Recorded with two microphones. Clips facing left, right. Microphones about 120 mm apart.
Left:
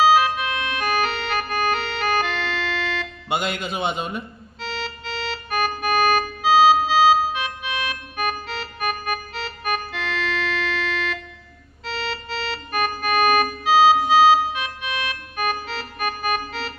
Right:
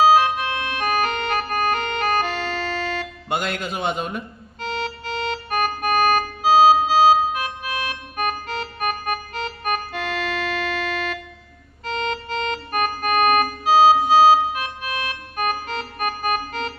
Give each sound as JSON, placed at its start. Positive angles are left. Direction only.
{"t": 0.1, "sound": "organ", "side_deg": -35}
{"t": 3.2, "sound": "speech", "side_deg": 0}
{"t": 4.6, "sound": "organ", "side_deg": -50}